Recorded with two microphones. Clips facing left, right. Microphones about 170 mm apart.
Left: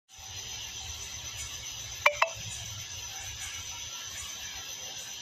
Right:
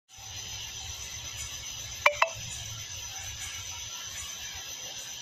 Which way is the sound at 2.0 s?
60° right (ahead or behind).